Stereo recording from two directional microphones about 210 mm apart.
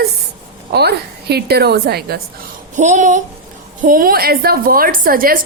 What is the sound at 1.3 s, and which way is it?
Speech, 50° right (ahead or behind).